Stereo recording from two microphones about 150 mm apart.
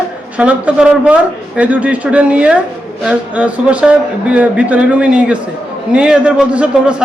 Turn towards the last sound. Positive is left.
turn(degrees=-5)  # may be behind; listen again after turning